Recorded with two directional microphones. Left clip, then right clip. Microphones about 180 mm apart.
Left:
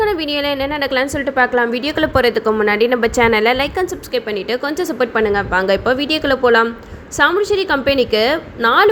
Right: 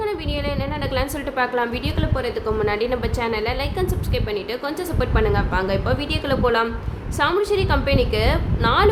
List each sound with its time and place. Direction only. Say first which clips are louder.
0.0 s a woman's voice: left 8 dB; 35° left (ahead or behind)
2.0 s a woman's voice: left 13 dB; 50° left (ahead or behind); by 8.9 s 30° left (ahead or behind)